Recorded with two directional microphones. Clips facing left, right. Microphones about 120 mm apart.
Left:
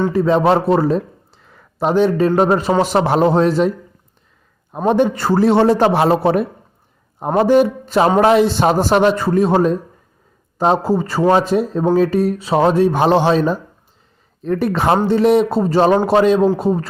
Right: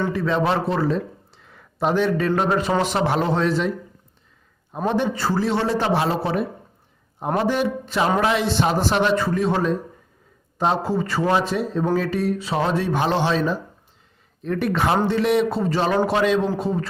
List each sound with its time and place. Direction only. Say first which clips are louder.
0.1 s speech: left 7 dB; 35° left (ahead or behind)
4.9 s speech: left 7 dB; 50° left (ahead or behind)